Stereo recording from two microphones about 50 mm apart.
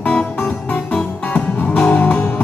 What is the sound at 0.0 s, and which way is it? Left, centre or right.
Music, left.